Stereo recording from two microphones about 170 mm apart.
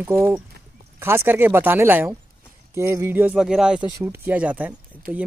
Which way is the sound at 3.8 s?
25° right (ahead or behind).